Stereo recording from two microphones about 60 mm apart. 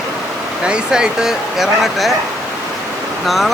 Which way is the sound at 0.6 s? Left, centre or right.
Centre.